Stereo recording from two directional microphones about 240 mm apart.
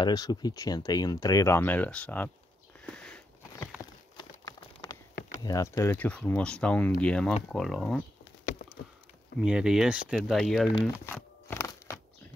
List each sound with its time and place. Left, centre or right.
0.0 s speech: centre
2.8 s a sound: centre
5.4 s speech: centre
9.4 s speech: centre
10.8 s crumpling: centre